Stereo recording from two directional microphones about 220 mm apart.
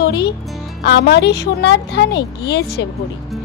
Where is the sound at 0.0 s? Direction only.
50° left (ahead or behind).